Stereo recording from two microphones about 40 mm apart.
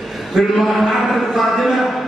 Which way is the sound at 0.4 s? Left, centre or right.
Centre.